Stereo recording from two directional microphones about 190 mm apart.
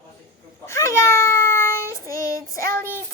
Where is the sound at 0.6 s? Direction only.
15° left (ahead or behind).